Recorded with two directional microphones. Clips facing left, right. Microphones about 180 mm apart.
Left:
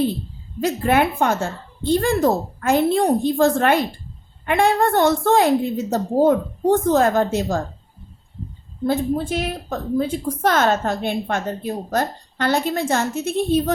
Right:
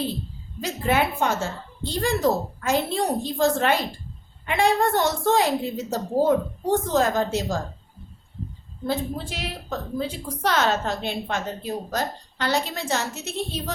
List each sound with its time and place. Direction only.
0.6 s a woman's voice: 55° left (ahead or behind)
8.9 s a woman's voice: 50° left (ahead or behind)